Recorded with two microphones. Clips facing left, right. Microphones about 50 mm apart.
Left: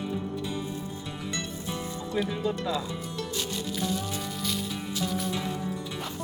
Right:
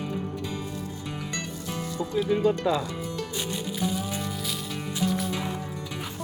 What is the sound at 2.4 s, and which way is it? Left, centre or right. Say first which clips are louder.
Speech: right 6 dB; right.